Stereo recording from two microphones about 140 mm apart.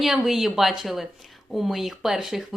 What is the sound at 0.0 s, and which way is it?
Speech, centre (ahead or behind).